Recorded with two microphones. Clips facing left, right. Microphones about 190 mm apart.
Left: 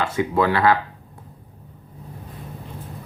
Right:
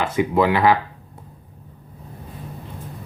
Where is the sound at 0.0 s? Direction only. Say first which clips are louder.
Right 2 dB; 15° right (ahead or behind).